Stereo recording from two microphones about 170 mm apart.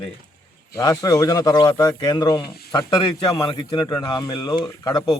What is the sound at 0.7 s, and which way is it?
Speech, 20° left (ahead or behind).